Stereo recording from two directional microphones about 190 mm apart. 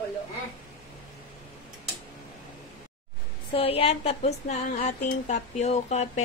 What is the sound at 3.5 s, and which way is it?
A woman's voice, 30° left (ahead or behind).